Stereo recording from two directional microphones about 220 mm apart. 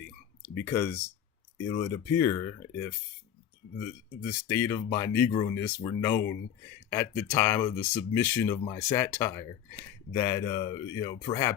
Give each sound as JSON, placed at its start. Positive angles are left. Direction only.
{"t": 0.4, "sound": "speech", "side_deg": 10}
{"t": 4.3, "sound": "speech", "side_deg": 10}